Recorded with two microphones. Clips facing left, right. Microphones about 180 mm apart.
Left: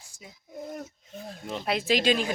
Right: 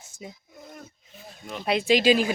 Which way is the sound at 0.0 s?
25° right (ahead or behind).